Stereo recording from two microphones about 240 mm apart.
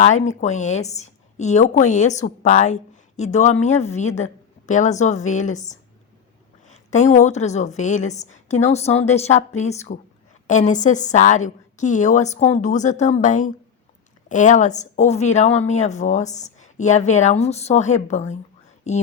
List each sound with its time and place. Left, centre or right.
0.0 s a woman's voice: left